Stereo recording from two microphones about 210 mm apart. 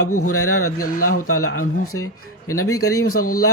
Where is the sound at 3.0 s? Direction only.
90° left.